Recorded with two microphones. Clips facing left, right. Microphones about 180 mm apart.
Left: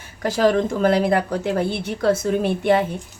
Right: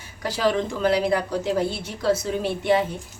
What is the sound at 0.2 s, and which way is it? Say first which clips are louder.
A woman's voice: left 5 dB; 45° left (ahead or behind).